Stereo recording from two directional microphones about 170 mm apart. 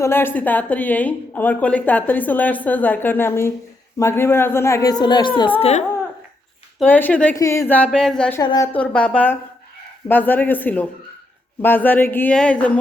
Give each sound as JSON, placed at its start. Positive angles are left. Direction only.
{"t": 0.0, "sound": "speech", "side_deg": 15}
{"t": 5.5, "sound": "speech", "side_deg": 40}
{"t": 6.7, "sound": "speech", "side_deg": 10}
{"t": 7.3, "sound": "speech", "side_deg": 20}
{"t": 8.4, "sound": "a woman's voice", "side_deg": 20}
{"t": 8.8, "sound": "speech", "side_deg": 5}